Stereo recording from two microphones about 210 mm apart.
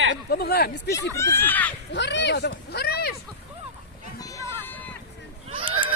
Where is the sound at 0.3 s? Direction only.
45° left (ahead or behind).